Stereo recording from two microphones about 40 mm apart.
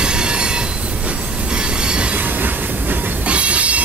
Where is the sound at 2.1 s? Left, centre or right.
Right.